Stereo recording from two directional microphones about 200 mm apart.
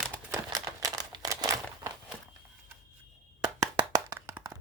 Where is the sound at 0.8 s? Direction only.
20° right (ahead or behind).